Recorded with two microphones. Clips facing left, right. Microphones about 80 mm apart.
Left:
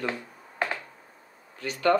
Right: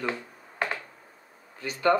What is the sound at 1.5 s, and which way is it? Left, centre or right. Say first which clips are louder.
Speech: even; centre.